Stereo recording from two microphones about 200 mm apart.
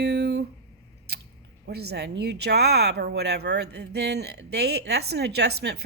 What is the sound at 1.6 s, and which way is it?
Speech, 55° right (ahead or behind).